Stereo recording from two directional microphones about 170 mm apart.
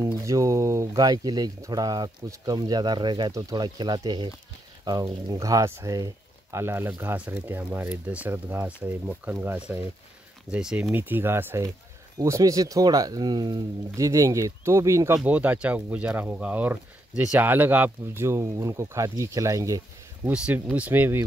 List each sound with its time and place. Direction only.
0.0 s speech: 20° right (ahead or behind)
20.2 s speech: 10° right (ahead or behind)